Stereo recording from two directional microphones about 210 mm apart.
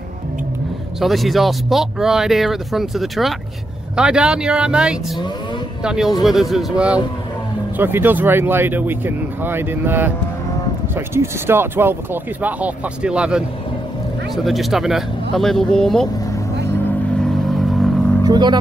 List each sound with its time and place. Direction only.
0.9 s speech: centre (ahead or behind)
17.2 s vehicle: centre (ahead or behind)
18.2 s speech: 20° right (ahead or behind)